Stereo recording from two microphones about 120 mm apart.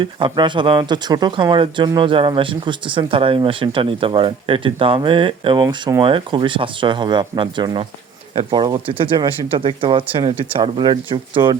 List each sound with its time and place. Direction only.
0.0 s speech: 40° right (ahead or behind)